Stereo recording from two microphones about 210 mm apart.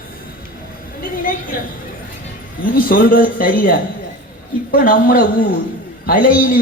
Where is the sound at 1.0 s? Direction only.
40° left (ahead or behind).